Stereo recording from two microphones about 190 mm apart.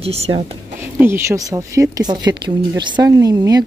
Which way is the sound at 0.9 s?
10° right (ahead or behind).